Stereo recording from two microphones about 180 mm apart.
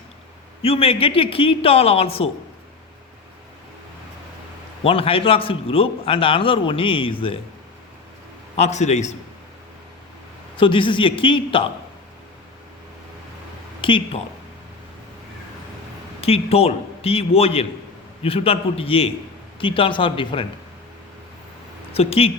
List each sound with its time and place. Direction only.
0.6 s speech: 30° left (ahead or behind)
4.8 s a man's voice: 30° left (ahead or behind)
8.5 s speech: 40° left (ahead or behind)
10.6 s a man's voice: 30° left (ahead or behind)
13.8 s a man's voice: 30° left (ahead or behind)
16.2 s a man's voice: 35° left (ahead or behind)
21.9 s speech: 35° left (ahead or behind)